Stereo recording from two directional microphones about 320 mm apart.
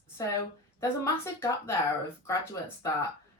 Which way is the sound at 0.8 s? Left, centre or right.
Centre.